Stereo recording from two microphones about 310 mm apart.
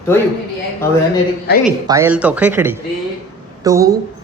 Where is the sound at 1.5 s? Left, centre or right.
Left.